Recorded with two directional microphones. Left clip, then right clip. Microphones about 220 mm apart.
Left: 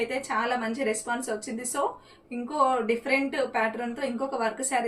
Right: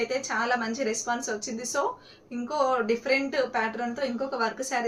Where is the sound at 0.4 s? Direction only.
15° right (ahead or behind).